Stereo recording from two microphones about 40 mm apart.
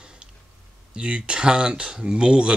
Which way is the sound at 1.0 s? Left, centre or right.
Right.